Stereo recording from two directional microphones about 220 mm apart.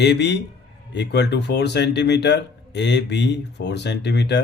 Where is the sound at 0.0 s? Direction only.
50° left (ahead or behind).